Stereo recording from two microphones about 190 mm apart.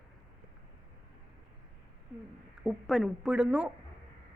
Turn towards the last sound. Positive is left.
turn(degrees=-5)  # may be behind; listen again after turning